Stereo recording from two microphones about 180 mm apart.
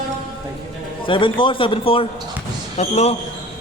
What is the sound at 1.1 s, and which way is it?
A man's voice, 25° left (ahead or behind).